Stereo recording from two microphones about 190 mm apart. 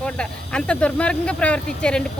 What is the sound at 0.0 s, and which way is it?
Speech, 5° left (ahead or behind).